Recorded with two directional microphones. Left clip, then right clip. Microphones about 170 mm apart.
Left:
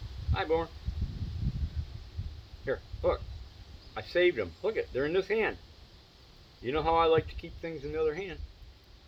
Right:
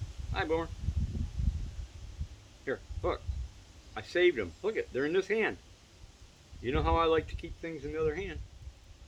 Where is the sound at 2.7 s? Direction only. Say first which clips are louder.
Left 4 dB; 20° right (ahead or behind).